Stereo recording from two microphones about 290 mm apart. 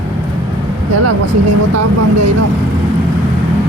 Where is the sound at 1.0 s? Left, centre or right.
Right.